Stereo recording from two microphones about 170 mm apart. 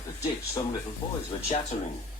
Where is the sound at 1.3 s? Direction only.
30° left (ahead or behind).